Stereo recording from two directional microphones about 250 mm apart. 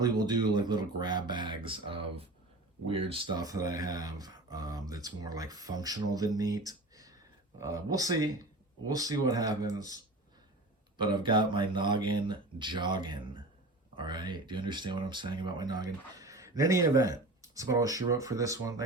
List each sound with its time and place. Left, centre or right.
0.0 s speech: centre
6.7 s a sound: centre
7.6 s speech: centre